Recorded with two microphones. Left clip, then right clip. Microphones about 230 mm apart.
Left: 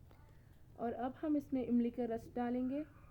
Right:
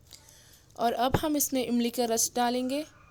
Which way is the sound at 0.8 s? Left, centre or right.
Right.